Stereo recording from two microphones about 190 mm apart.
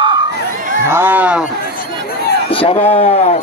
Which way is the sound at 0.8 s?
10° right (ahead or behind).